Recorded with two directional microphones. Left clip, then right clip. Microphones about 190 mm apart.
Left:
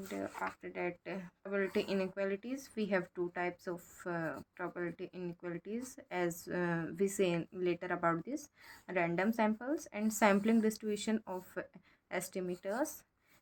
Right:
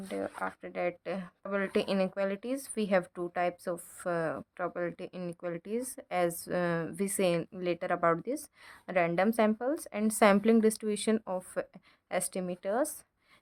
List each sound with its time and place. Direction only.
0.1 s speech: 45° right (ahead or behind)